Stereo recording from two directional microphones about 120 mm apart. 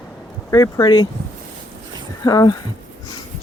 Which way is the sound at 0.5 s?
30° left (ahead or behind).